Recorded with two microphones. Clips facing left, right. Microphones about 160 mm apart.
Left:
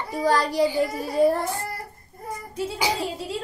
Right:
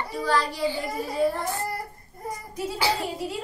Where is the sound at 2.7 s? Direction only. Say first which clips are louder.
Right 1 dB; 15° left (ahead or behind).